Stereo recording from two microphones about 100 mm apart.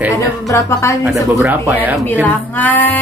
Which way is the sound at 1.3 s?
20° right (ahead or behind).